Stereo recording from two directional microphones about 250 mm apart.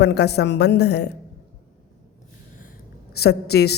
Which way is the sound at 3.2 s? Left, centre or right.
Left.